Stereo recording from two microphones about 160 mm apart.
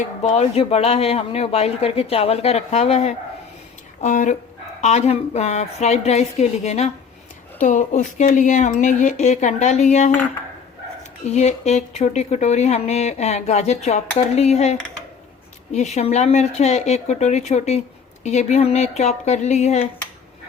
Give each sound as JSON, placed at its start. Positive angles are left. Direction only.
{"t": 0.2, "sound": "speech", "side_deg": 40}
{"t": 11.3, "sound": "speech", "side_deg": 45}